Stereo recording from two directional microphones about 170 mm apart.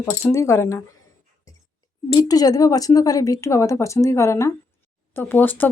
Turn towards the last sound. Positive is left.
turn(degrees=10)  # may be behind; listen again after turning